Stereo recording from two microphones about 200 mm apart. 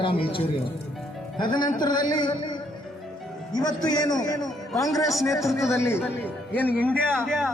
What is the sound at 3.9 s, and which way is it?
Speech, 20° left (ahead or behind).